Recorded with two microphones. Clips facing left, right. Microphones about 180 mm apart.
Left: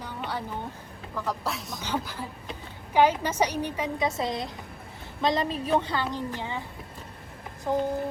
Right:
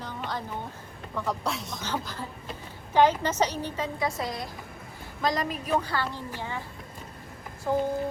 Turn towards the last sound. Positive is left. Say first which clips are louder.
# even
turn(degrees=15)  # may be behind; listen again after turning